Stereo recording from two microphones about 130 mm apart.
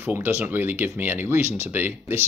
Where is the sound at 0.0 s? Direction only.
15° right (ahead or behind).